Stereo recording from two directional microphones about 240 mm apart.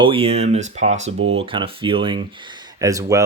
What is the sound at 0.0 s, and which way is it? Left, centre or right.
Speech, right.